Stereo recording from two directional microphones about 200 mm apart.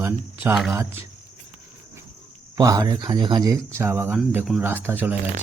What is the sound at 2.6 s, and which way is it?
Speech, 20° right (ahead or behind).